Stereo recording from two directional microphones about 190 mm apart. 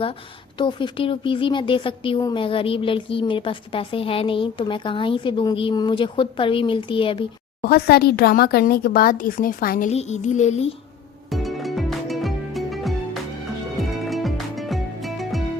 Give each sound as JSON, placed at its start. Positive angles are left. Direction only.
{"t": 0.6, "sound": "speech", "side_deg": 25}
{"t": 7.6, "sound": "speech", "side_deg": 55}
{"t": 9.9, "sound": "music", "side_deg": 35}
{"t": 11.3, "sound": "music", "side_deg": 0}